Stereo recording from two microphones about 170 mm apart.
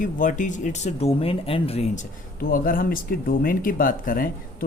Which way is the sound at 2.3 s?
55° left (ahead or behind).